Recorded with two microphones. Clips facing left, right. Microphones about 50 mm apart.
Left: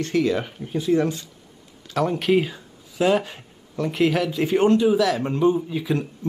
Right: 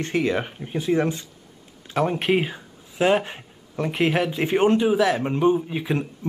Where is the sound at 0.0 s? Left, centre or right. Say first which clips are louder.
Left 1 dB; right.